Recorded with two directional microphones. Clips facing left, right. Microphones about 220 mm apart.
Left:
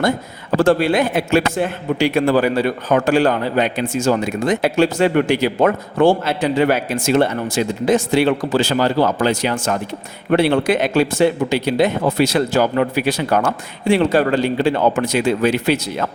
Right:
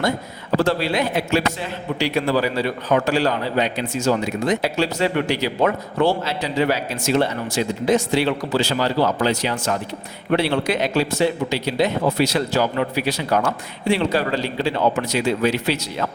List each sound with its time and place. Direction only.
0.5 s a man's voice: 50° left (ahead or behind)